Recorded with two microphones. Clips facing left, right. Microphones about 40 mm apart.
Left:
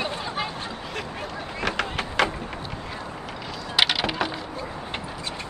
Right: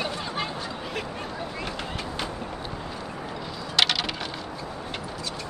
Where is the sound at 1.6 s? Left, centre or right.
Left.